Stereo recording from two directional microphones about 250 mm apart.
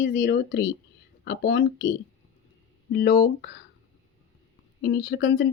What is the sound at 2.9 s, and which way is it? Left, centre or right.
Speech, left.